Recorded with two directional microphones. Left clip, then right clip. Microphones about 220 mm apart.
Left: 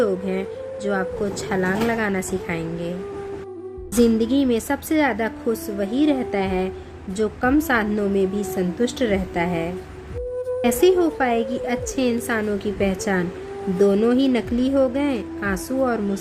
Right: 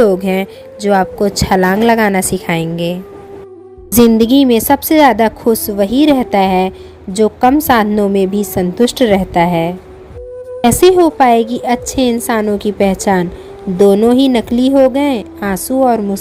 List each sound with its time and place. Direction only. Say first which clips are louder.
0.0 s a woman's voice: right 11 dB; 35° right (ahead or behind)
4.2 s a woman's voice: right 11 dB; 35° right (ahead or behind)